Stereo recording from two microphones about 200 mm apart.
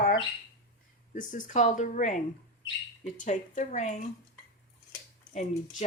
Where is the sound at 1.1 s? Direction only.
40° left (ahead or behind).